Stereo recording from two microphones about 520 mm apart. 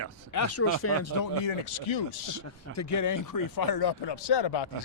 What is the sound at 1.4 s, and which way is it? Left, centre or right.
Speech, left.